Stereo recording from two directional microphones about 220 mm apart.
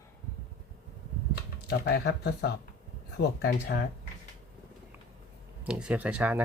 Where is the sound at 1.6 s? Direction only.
45° left (ahead or behind).